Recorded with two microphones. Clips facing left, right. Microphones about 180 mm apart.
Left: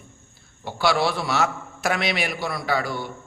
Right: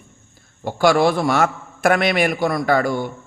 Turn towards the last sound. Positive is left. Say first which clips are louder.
# right 7 dB
turn(degrees=-50)  # may be behind; listen again after turning